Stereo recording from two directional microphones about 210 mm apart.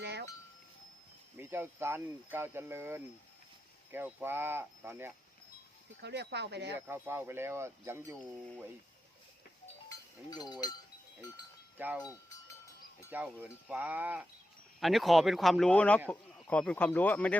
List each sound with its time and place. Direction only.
0.0 s a sound: 50° right (ahead or behind)
1.4 s speech: 10° right (ahead or behind)
6.0 s speech: 55° right (ahead or behind)
6.7 s speech: 10° right (ahead or behind)
10.2 s speech: 20° left (ahead or behind)
11.8 s speech: 10° right (ahead or behind)
12.0 s livestock: 15° left (ahead or behind)
13.1 s speech: 10° right (ahead or behind); by 17.3 s 5° left (ahead or behind)